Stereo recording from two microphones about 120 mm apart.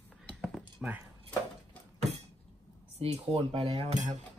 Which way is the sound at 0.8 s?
5° right (ahead or behind).